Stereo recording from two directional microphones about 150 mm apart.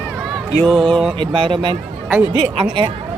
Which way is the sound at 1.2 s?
35° right (ahead or behind).